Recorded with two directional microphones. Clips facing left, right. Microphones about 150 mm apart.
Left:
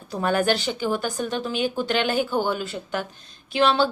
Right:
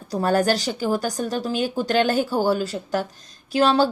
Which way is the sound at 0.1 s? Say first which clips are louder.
Right 2 dB; 40° right (ahead or behind).